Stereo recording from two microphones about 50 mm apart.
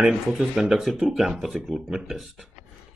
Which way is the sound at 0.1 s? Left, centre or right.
Centre.